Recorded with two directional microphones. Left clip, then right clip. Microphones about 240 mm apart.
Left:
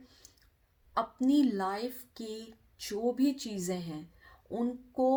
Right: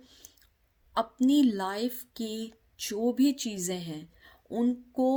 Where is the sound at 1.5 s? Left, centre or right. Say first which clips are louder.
Right 2 dB; right.